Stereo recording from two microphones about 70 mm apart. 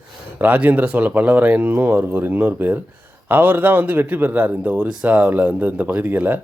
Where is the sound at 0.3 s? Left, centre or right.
Right.